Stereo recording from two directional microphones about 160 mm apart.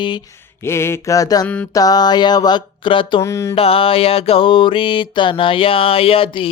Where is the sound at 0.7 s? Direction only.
15° left (ahead or behind).